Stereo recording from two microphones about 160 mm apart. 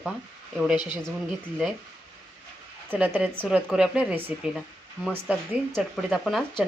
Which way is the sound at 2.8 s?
10° right (ahead or behind).